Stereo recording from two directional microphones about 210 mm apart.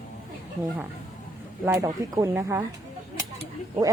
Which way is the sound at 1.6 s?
15° right (ahead or behind).